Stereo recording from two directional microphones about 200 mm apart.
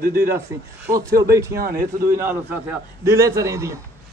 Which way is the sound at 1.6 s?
45° right (ahead or behind).